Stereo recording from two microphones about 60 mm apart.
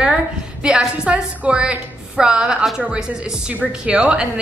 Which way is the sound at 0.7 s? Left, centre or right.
Centre.